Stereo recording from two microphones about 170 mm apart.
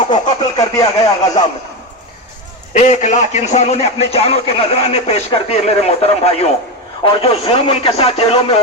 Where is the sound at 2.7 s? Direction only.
45° left (ahead or behind).